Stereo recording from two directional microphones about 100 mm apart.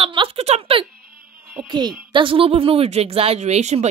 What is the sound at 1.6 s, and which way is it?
Speech, 50° right (ahead or behind).